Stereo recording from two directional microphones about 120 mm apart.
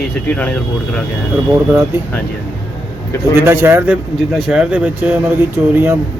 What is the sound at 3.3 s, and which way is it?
Speech, 20° right (ahead or behind).